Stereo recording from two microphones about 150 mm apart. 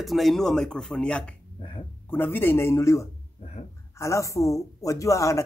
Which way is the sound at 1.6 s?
35° left (ahead or behind).